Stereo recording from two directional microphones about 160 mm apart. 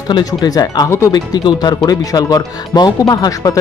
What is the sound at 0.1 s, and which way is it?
Speech, 25° left (ahead or behind).